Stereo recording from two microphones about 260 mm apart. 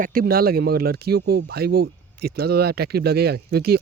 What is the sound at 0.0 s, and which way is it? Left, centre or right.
Speech, right.